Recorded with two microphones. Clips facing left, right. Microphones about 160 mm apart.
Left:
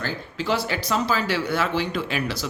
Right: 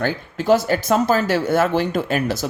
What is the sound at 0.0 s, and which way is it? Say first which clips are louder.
Speech: right 6 dB; 50° right (ahead or behind).